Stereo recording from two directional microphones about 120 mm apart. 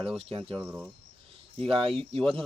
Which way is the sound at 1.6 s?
50° right (ahead or behind).